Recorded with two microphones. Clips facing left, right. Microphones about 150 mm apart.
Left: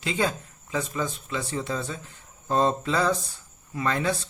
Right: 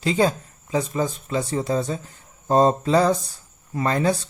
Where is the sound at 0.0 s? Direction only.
40° right (ahead or behind).